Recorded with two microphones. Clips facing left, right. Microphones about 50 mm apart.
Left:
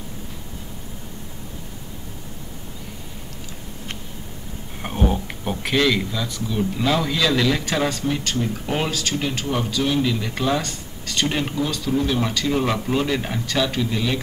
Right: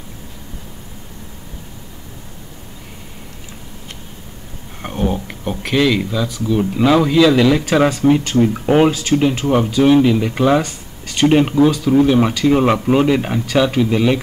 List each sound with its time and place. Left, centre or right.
4.8 s a sound: centre
6.5 s speech: right
10.6 s speech: centre
11.2 s speech: right